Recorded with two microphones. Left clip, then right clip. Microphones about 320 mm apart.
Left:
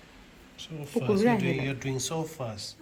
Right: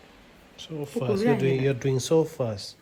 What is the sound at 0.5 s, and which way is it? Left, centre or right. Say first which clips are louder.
Speech: right 1 dB; centre.